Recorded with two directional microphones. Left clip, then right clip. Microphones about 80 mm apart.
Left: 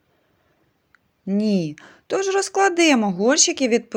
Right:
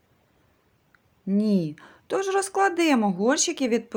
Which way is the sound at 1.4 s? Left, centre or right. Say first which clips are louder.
Left 3 dB; left.